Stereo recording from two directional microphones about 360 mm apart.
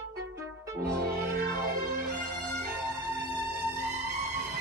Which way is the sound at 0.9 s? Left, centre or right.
Right.